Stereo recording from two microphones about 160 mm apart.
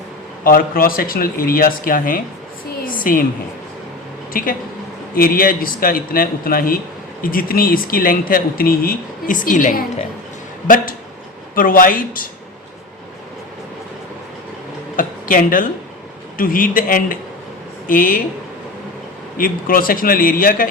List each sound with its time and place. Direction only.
0.4 s speech: 65° left (ahead or behind)
2.8 s a sound: 60° left (ahead or behind)
4.3 s a woman's voice: 60° left (ahead or behind)
11.5 s speech: 60° left (ahead or behind)
14.9 s a sound: 60° left (ahead or behind)
16.4 s speech: 60° left (ahead or behind)
19.4 s speech: 60° left (ahead or behind)